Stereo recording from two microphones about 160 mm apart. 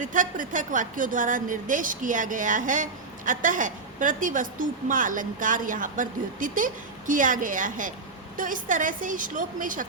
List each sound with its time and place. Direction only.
0.0 s a woman's voice: 55° right (ahead or behind)